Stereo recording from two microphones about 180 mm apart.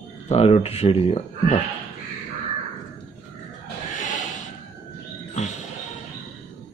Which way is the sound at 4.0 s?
45° left (ahead or behind).